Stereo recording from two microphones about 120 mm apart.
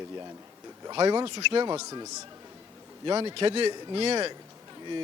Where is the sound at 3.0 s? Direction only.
40° right (ahead or behind).